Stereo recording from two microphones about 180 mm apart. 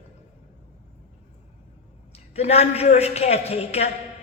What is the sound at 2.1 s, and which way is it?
A woman's voice, 35° left (ahead or behind).